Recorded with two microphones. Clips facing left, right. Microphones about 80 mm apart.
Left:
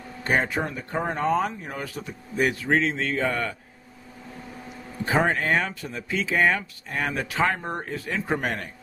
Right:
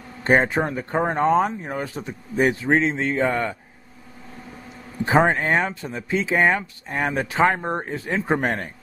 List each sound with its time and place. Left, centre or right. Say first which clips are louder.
0.2 s speech: right 6 dB; right
5.0 s speech: right 4 dB; right